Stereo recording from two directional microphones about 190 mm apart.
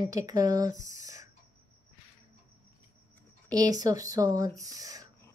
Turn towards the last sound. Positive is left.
turn(degrees=-20)  # may be behind; listen again after turning